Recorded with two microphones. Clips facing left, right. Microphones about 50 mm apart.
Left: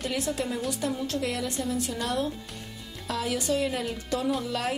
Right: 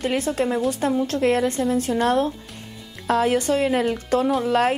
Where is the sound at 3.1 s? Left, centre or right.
Right.